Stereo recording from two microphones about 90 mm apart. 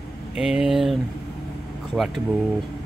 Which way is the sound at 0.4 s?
5° right (ahead or behind).